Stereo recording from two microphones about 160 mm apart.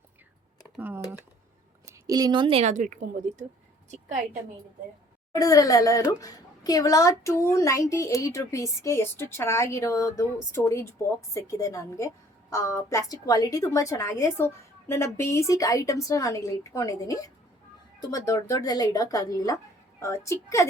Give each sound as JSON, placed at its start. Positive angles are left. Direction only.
{"t": 0.8, "sound": "speech", "side_deg": -10}
{"t": 5.3, "sound": "a woman's voice", "side_deg": 20}